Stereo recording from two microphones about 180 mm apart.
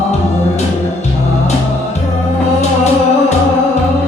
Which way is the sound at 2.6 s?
40° left (ahead or behind).